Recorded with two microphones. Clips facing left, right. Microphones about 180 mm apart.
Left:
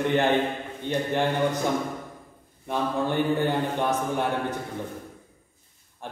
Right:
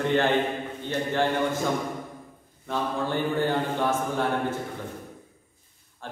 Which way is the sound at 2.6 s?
15° left (ahead or behind).